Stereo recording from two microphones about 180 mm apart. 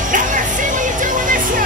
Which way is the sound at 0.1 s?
45° right (ahead or behind).